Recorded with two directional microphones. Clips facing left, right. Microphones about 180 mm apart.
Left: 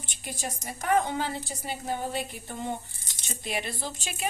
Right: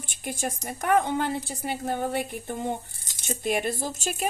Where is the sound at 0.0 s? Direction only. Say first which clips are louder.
Right 5 dB; 50° right (ahead or behind).